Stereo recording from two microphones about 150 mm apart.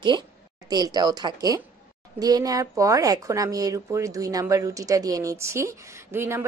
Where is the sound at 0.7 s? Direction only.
25° right (ahead or behind).